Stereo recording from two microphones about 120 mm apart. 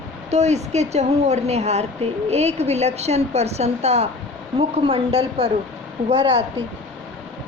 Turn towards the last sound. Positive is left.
turn(degrees=-55)  # may be behind; listen again after turning